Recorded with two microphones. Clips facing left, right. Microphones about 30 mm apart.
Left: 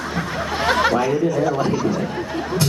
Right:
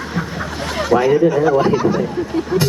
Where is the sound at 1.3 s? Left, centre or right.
Right.